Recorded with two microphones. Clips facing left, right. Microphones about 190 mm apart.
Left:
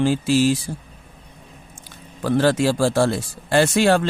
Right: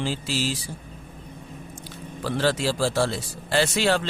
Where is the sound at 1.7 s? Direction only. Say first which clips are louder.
Right 6 dB; 50° left (ahead or behind).